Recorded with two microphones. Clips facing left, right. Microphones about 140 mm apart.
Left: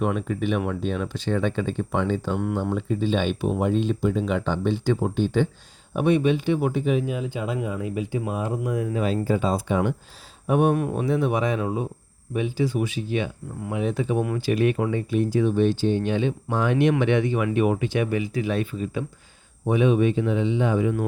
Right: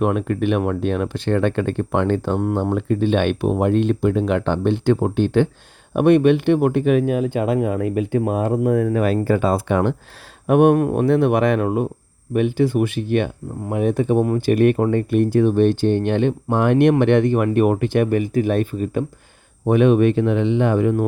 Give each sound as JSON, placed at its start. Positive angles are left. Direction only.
{"t": 0.0, "sound": "speech", "side_deg": -65}
{"t": 19.6, "sound": "speech", "side_deg": -65}